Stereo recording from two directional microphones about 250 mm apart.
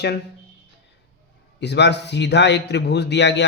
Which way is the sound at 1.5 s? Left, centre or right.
Left.